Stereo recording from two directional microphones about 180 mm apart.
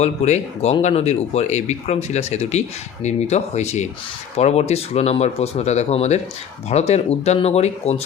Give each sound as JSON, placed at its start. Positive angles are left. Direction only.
{"t": 0.0, "sound": "speech", "side_deg": 40}